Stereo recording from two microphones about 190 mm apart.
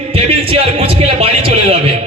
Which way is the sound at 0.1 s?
30° right (ahead or behind).